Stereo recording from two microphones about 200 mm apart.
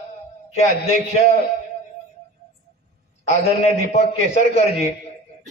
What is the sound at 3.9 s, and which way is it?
Speech, 35° left (ahead or behind).